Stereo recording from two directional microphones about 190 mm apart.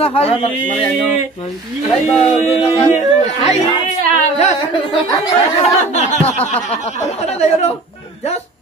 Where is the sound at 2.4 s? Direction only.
35° left (ahead or behind).